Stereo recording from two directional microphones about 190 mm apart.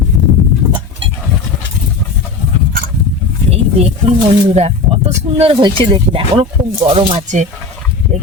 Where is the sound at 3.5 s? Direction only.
35° right (ahead or behind).